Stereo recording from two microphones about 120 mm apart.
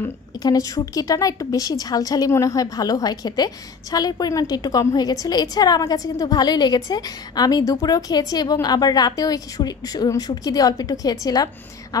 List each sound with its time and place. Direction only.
0.4 s a woman's voice: 30° left (ahead or behind)